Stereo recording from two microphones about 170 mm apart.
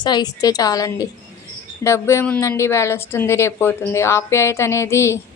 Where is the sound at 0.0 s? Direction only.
25° left (ahead or behind).